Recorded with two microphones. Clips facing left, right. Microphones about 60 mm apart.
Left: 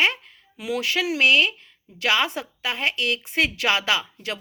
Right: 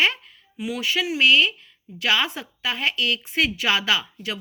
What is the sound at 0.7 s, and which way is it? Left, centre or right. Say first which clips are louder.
Speech: left 1 dB; left.